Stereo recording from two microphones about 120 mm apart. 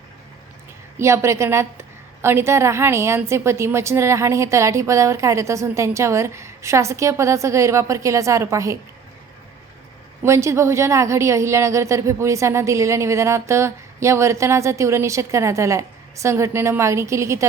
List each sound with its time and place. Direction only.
0.9 s a woman's voice: 25° right (ahead or behind)
10.2 s a woman's voice: 25° right (ahead or behind)